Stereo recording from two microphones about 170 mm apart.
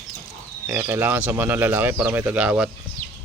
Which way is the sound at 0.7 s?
15° right (ahead or behind).